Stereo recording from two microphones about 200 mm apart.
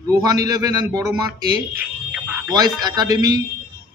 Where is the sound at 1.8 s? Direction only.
5° right (ahead or behind).